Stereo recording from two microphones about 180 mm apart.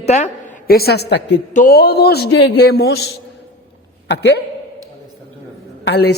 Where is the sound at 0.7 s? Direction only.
60° left (ahead or behind).